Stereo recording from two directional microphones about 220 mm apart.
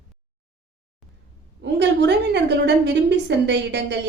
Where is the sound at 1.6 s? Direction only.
50° right (ahead or behind).